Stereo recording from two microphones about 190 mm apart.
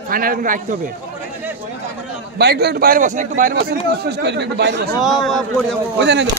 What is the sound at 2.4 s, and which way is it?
A man's voice, 60° right (ahead or behind).